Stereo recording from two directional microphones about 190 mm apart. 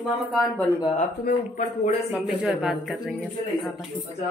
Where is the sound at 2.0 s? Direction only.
Centre (ahead or behind).